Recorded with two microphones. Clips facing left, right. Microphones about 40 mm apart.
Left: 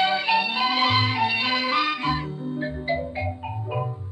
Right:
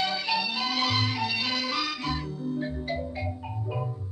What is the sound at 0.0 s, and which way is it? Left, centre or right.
Music, left.